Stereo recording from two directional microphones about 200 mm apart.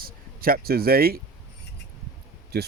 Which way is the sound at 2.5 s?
50° right (ahead or behind).